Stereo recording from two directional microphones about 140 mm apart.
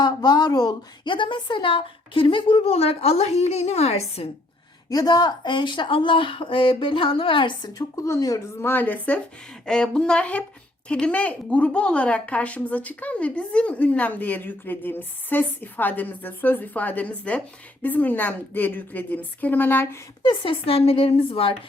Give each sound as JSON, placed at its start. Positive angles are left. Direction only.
{"t": 0.0, "sound": "speech", "side_deg": 30}
{"t": 4.9, "sound": "speech", "side_deg": 30}
{"t": 20.2, "sound": "speech", "side_deg": 35}